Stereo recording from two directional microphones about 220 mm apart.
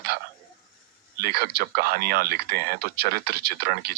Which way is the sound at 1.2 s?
45° right (ahead or behind).